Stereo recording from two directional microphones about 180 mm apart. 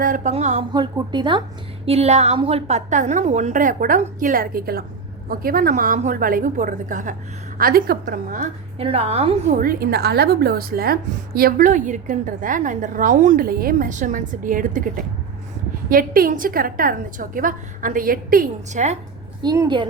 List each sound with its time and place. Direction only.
0.0 s a woman's voice: 45° right (ahead or behind)
0.7 s a woman's voice: 25° right (ahead or behind); by 7.2 s 45° right (ahead or behind)
7.6 s a woman's voice: 55° right (ahead or behind)
8.8 s a woman's voice: 30° right (ahead or behind)
9.6 s a woman's voice: 55° right (ahead or behind)
19.4 s a woman's voice: 25° right (ahead or behind)